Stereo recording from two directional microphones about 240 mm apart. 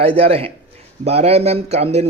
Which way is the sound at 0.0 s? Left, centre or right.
Right.